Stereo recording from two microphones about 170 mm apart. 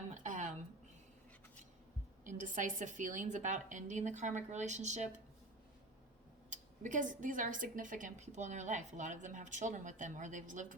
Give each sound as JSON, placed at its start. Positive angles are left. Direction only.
{"t": 0.1, "sound": "a sound", "side_deg": -50}
{"t": 2.2, "sound": "a woman's voice", "side_deg": -50}
{"t": 6.5, "sound": "a woman's voice", "side_deg": -50}